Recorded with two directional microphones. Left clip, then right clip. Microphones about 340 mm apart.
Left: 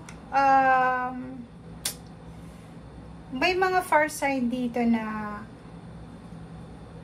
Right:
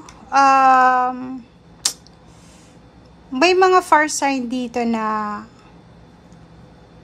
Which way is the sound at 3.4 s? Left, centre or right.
Centre.